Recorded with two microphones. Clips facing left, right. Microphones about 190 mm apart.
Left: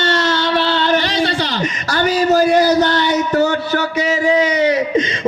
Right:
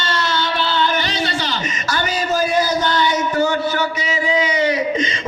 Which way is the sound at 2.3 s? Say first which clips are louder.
Left 5 dB; 65° left (ahead or behind).